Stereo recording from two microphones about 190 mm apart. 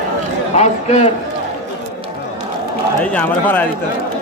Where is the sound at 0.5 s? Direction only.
35° left (ahead or behind).